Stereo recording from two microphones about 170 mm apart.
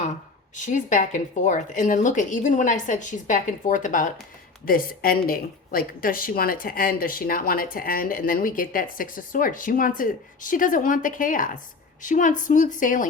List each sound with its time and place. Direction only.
0.5 s speech: 45° left (ahead or behind)